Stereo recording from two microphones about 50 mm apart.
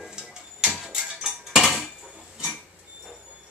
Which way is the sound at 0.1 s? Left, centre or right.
Centre.